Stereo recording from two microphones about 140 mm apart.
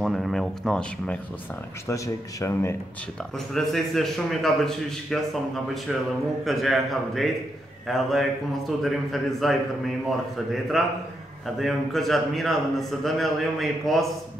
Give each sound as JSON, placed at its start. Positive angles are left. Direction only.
{"t": 0.0, "sound": "speech", "side_deg": 0}
{"t": 1.9, "sound": "speech", "side_deg": 20}
{"t": 3.3, "sound": "a man's voice", "side_deg": 0}
{"t": 6.4, "sound": "a man's voice", "side_deg": 0}